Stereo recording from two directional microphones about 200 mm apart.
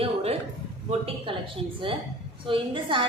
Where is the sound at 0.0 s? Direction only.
30° right (ahead or behind).